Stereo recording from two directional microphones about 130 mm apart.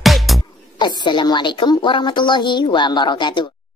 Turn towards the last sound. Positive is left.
turn(degrees=35)  # may be behind; listen again after turning